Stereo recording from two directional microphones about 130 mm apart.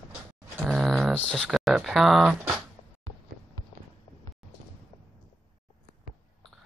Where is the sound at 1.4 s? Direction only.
Centre (ahead or behind).